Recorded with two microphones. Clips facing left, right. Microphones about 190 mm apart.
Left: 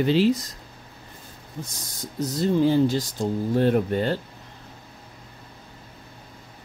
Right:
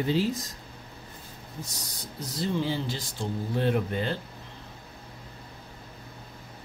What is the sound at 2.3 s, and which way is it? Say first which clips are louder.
Speech: left 8 dB; 45° left (ahead or behind).